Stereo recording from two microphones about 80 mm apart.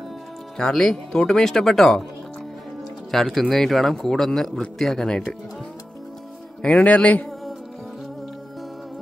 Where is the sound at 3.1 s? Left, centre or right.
Centre.